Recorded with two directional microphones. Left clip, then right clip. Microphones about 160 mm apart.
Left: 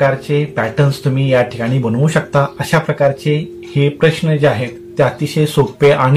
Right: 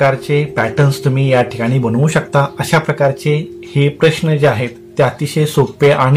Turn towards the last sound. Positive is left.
turn(degrees=-30)  # may be behind; listen again after turning